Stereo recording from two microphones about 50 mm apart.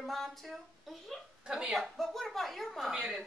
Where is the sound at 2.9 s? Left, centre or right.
Centre.